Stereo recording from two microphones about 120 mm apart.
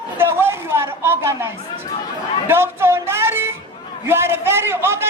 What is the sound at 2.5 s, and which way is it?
Music, 20° right (ahead or behind).